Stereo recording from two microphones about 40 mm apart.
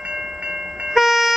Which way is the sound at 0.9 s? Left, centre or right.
Centre.